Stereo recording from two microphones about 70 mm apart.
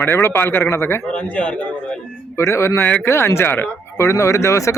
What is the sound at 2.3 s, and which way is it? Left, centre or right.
Speech, left.